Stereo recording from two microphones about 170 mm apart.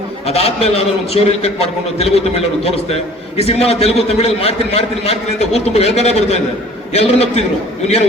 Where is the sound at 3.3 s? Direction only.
35° left (ahead or behind).